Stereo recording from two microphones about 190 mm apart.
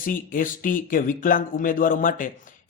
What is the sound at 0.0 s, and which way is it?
Speech, 45° left (ahead or behind).